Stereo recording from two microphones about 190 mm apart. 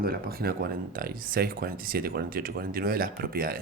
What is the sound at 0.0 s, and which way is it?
Speech, 50° right (ahead or behind).